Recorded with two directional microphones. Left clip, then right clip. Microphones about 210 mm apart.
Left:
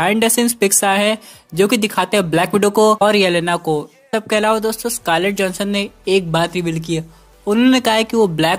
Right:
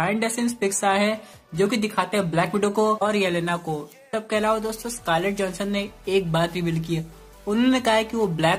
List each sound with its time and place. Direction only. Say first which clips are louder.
0.0 s speech: left 9 dB; 45° left (ahead or behind)